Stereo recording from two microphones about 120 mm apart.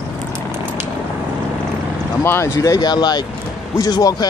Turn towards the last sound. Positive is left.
turn(degrees=30)  # may be behind; listen again after turning